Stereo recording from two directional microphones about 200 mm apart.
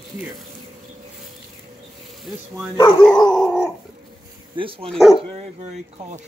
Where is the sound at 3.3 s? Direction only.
Centre (ahead or behind).